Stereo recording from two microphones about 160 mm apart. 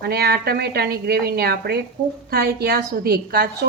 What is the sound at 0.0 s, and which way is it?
A woman's voice, 75° right (ahead or behind).